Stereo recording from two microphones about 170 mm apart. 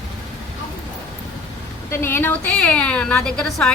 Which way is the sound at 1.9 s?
15° left (ahead or behind).